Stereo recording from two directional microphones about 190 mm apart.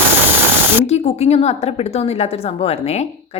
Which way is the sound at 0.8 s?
35° left (ahead or behind).